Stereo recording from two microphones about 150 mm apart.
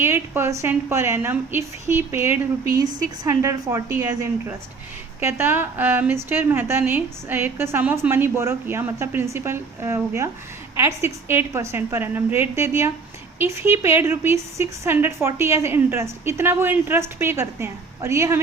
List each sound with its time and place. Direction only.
0.0 s a woman's voice: 15° right (ahead or behind)